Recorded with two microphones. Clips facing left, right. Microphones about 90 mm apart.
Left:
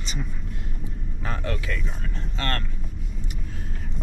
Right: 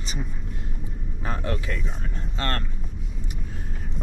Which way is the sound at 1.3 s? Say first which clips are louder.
Right 1 dB; 40° right (ahead or behind).